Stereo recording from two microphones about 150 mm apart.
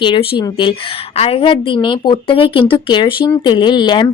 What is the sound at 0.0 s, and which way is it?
A woman's voice, 35° left (ahead or behind).